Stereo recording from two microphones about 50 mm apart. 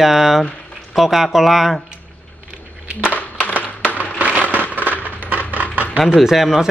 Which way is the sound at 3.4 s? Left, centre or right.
Left.